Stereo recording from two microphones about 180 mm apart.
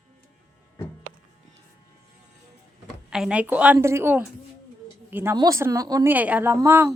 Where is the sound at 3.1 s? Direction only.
5° right (ahead or behind).